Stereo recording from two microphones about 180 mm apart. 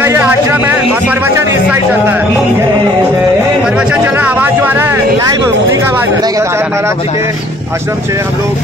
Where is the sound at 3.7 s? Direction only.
5° right (ahead or behind).